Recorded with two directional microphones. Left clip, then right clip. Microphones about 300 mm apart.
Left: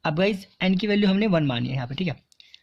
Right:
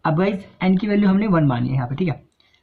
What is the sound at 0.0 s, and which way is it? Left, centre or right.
Speech, left.